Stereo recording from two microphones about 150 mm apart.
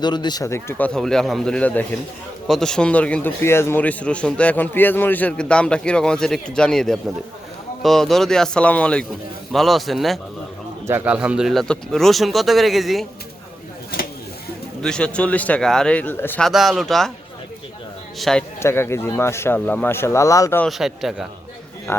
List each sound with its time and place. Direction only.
0.0 s a man's voice: 30° left (ahead or behind); by 10.2 s centre (ahead or behind)
10.8 s speech: 10° right (ahead or behind)
14.8 s a man's voice: 5° left (ahead or behind)
16.4 s speech: centre (ahead or behind)
18.2 s speech: 5° left (ahead or behind)
18.6 s a man's voice: 15° left (ahead or behind)
20.7 s speech: centre (ahead or behind)
21.9 s a man's voice: 15° left (ahead or behind)